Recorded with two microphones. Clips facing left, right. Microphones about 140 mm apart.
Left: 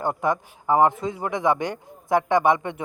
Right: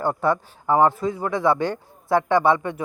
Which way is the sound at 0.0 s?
15° left (ahead or behind).